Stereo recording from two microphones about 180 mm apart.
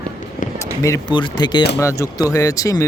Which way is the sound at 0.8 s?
20° left (ahead or behind).